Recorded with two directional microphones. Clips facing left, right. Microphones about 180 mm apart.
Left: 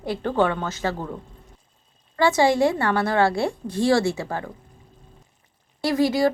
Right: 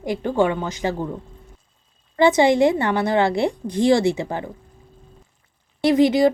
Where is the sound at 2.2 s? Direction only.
20° right (ahead or behind).